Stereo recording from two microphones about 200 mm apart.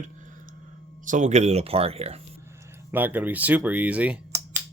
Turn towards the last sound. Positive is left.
turn(degrees=-5)  # may be behind; listen again after turning